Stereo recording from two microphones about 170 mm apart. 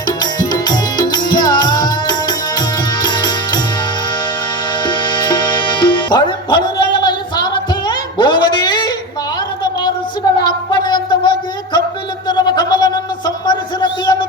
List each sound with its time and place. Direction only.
0.2 s music: 25° left (ahead or behind)
4.8 s music: 25° left (ahead or behind)
10.4 s a sound: 25° left (ahead or behind)